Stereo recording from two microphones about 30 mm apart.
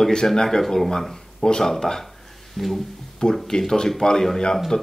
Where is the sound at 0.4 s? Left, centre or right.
Centre.